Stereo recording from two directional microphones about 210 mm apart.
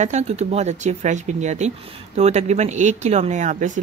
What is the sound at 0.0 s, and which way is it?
A woman's voice, 30° right (ahead or behind).